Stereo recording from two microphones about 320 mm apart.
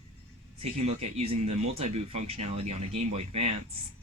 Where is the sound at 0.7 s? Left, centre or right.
Centre.